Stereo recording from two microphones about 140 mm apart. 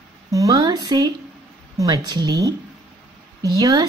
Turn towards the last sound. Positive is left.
turn(degrees=-25)  # may be behind; listen again after turning